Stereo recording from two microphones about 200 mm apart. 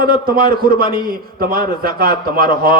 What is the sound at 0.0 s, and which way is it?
A man's voice, 50° right (ahead or behind).